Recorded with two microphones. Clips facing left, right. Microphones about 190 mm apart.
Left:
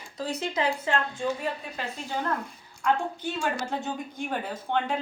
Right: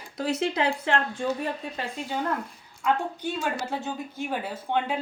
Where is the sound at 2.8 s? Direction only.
5° right (ahead or behind).